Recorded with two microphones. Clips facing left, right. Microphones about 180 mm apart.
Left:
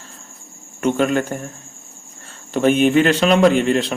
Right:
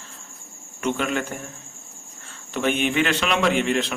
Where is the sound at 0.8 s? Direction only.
45° left (ahead or behind).